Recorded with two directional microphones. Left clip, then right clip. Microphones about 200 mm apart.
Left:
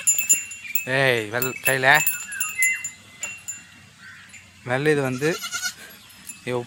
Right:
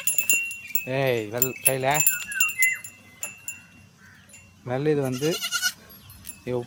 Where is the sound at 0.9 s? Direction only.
Centre (ahead or behind).